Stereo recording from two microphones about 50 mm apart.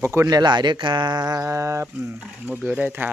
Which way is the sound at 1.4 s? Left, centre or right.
Right.